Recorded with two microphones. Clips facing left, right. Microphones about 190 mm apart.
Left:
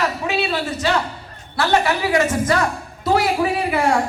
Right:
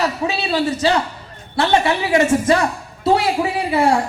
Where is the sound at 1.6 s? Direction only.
25° right (ahead or behind).